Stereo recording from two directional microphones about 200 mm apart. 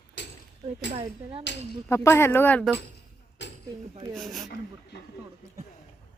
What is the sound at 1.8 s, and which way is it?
Speech, 15° left (ahead or behind).